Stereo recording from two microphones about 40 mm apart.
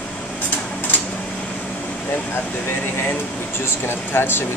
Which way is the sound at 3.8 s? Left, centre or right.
Left.